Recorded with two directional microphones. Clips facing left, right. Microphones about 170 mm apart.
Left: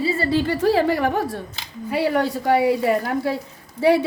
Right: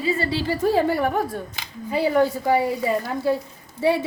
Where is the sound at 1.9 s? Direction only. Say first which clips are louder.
Right 1 dB; 70° left (ahead or behind).